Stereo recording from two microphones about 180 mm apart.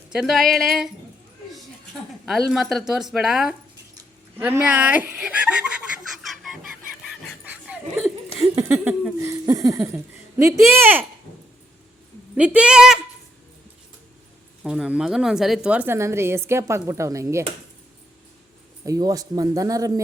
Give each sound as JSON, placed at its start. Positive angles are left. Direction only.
{"t": 0.1, "sound": "speech", "side_deg": 0}
{"t": 2.2, "sound": "speech", "side_deg": 0}
{"t": 6.2, "sound": "a sound", "side_deg": 0}
{"t": 8.4, "sound": "speech", "side_deg": -15}
{"t": 12.5, "sound": "speech", "side_deg": -5}
{"t": 14.6, "sound": "speech", "side_deg": -5}
{"t": 18.9, "sound": "speech", "side_deg": -20}